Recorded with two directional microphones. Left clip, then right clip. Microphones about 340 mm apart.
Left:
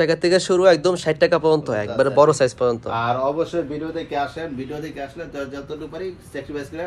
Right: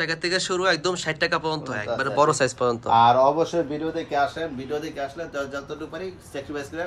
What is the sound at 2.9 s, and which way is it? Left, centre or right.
Speech, right.